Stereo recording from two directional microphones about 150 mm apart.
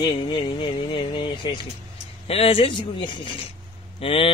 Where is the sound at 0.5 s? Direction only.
35° left (ahead or behind).